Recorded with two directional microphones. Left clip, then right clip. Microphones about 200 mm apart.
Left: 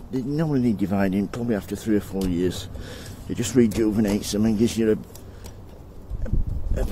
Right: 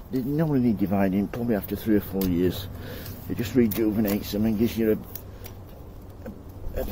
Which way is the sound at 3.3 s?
35° left (ahead or behind).